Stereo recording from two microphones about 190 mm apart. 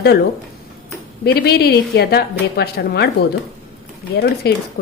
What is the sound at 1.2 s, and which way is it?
A woman's voice, 60° left (ahead or behind).